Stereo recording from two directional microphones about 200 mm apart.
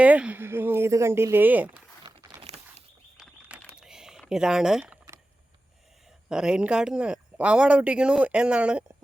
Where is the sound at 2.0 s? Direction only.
25° right (ahead or behind).